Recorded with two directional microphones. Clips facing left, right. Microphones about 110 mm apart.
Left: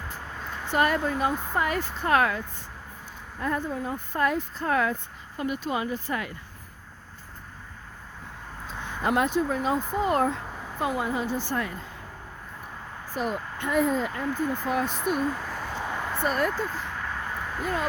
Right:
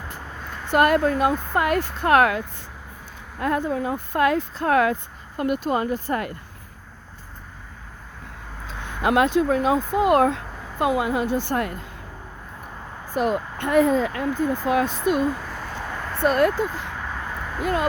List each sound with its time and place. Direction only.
0.7 s speech: 65° right (ahead or behind)
5.4 s speech: 55° right (ahead or behind)
8.6 s speech: 70° right (ahead or behind)
13.1 s speech: 75° right (ahead or behind)
15.7 s a sound: 10° left (ahead or behind)
16.2 s speech: 80° right
17.6 s speech: 75° right (ahead or behind)